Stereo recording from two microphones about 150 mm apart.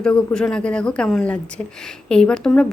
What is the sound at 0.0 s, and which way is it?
A woman's voice, 5° left (ahead or behind).